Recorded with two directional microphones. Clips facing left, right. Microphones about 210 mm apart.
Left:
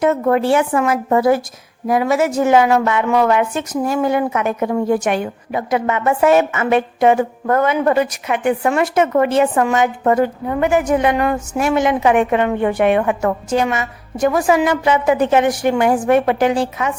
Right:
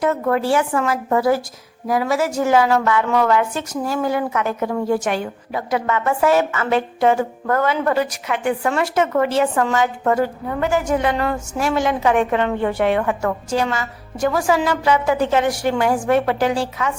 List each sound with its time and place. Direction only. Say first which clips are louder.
0.0 s a woman's voice: left 4 dB; 20° left (ahead or behind)